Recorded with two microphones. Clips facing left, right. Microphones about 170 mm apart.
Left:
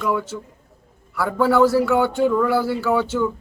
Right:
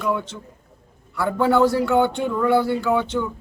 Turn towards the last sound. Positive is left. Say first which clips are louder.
# even
turn(degrees=5)  # may be behind; listen again after turning